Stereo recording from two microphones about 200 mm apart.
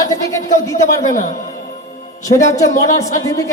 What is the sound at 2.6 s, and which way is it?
Speech, 40° left (ahead or behind).